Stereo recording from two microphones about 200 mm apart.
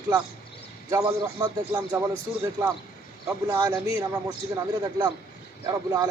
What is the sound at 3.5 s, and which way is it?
A man's voice, 20° right (ahead or behind).